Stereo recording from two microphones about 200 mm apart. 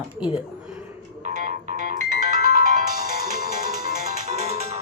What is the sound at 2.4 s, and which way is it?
Ringtone, 40° right (ahead or behind).